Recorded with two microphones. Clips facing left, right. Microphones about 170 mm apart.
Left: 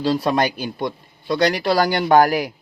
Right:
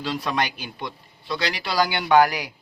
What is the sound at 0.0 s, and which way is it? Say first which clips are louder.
A man's voice: left 7 dB; 35° left (ahead or behind).